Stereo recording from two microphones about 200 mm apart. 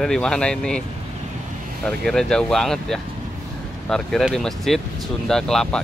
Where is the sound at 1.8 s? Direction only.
Centre (ahead or behind).